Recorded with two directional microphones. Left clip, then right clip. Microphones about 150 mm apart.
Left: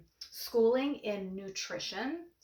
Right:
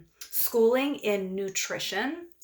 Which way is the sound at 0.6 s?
25° right (ahead or behind).